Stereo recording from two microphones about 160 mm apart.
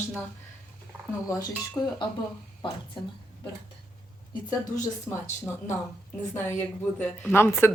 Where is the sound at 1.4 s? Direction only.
25° left (ahead or behind).